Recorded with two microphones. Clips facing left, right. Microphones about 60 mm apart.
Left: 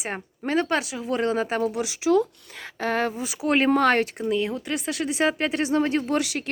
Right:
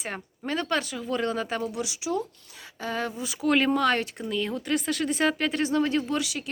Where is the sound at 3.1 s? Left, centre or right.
Left.